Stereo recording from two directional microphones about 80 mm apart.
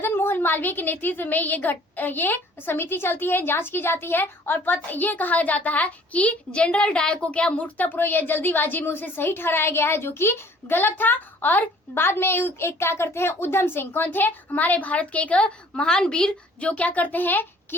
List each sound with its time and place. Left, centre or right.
0.0 s a woman's voice: left